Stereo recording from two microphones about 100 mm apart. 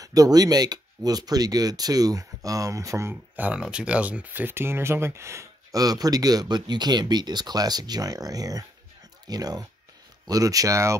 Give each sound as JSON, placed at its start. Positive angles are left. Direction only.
{"t": 0.0, "sound": "speech", "side_deg": -35}
{"t": 3.3, "sound": "speech", "side_deg": -15}